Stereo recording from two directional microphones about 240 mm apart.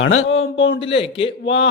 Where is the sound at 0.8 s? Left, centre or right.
Left.